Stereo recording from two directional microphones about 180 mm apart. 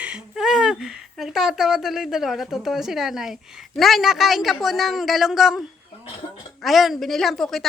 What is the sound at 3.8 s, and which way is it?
Speech, centre (ahead or behind).